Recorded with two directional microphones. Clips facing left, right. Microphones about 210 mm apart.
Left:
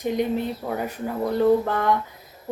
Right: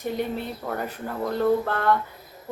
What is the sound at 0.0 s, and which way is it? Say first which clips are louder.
Speech: left 4 dB; 15° left (ahead or behind).